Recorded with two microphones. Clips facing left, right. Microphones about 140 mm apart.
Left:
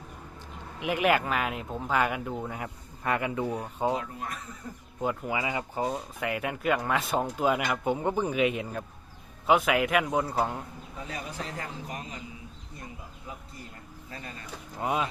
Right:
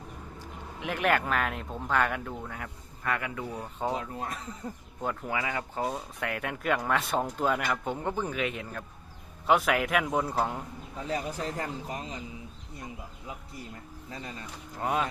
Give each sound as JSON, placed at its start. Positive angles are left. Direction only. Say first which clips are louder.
{"t": 0.8, "sound": "speech", "louder": "left 2 dB", "side_deg": 10}
{"t": 2.4, "sound": "speech", "louder": "left 4 dB", "side_deg": 20}
{"t": 3.6, "sound": "speech", "louder": "left 3 dB", "side_deg": 15}
{"t": 5.0, "sound": "speech", "louder": "left 2 dB", "side_deg": 10}
{"t": 9.5, "sound": "a man's voice", "louder": "left 1 dB", "side_deg": 0}
{"t": 11.1, "sound": "speech", "louder": "right 5 dB", "side_deg": -30}
{"t": 14.8, "sound": "a man's voice", "louder": "even", "side_deg": 5}